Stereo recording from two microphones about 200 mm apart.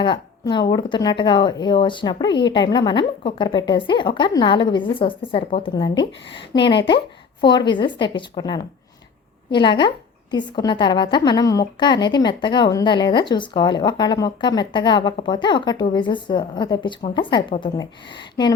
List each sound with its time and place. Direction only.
0.0 s a woman's voice: 25° left (ahead or behind)